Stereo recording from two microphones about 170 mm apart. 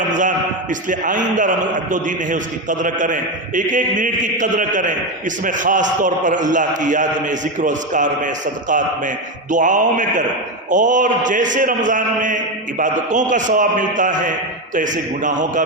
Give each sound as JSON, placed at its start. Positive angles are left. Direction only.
{"t": 0.2, "sound": "a man's voice", "side_deg": -50}
{"t": 9.5, "sound": "a man's voice", "side_deg": -50}